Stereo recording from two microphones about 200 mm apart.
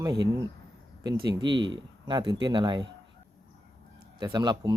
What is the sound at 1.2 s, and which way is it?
Speech, 20° right (ahead or behind).